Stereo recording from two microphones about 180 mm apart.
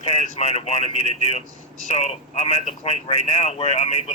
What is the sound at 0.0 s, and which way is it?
Speech, 40° left (ahead or behind).